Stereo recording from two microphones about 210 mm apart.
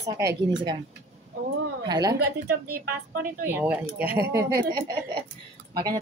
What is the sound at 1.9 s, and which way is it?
Speech, 20° right (ahead or behind).